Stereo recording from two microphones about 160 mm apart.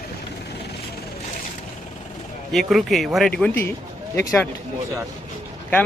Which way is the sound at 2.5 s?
Centre (ahead or behind).